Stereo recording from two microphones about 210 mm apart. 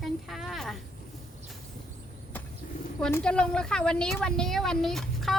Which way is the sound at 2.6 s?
40° left (ahead or behind).